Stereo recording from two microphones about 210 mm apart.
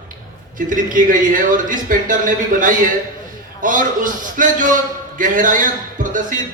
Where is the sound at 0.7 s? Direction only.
40° right (ahead or behind).